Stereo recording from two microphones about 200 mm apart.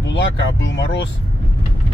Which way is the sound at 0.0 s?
65° left (ahead or behind).